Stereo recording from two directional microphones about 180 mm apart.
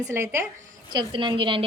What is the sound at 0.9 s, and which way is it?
Speech, 25° right (ahead or behind).